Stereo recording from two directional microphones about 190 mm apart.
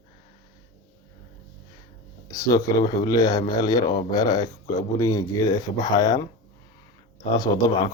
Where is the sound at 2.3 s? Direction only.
20° left (ahead or behind).